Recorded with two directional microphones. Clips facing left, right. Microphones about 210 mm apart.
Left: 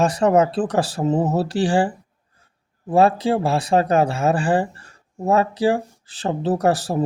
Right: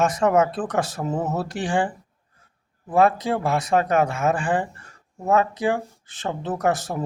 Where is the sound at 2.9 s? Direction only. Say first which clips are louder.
Left 3 dB; 30° left (ahead or behind).